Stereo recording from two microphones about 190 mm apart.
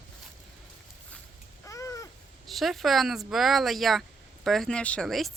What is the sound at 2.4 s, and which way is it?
Speech, centre (ahead or behind).